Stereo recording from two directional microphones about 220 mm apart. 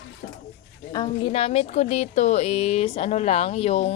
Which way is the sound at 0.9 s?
20° left (ahead or behind).